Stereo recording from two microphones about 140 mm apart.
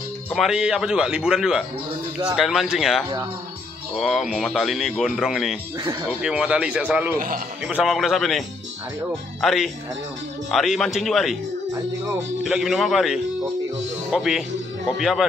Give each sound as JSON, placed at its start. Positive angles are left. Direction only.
{"t": 0.3, "sound": "speech", "side_deg": 0}
{"t": 7.2, "sound": "a man's voice", "side_deg": -85}
{"t": 7.6, "sound": "speech", "side_deg": -5}
{"t": 12.4, "sound": "speech", "side_deg": 0}